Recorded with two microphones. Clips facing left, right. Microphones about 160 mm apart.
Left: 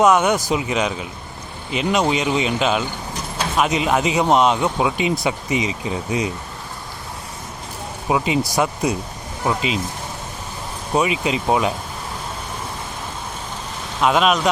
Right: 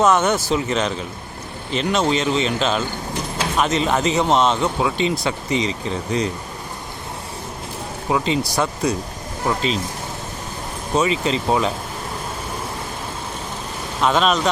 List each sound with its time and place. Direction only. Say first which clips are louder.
0.0 s speech: left 1 dB; 10° left (ahead or behind)
8.1 s speech: left 1 dB; 15° left (ahead or behind)
9.5 s speech: even; 10° left (ahead or behind)
10.9 s speech: even; 15° left (ahead or behind)
14.0 s speech: left 1 dB; 5° left (ahead or behind)